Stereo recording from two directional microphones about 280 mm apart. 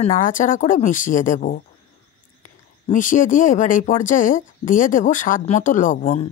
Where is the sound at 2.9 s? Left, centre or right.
Left.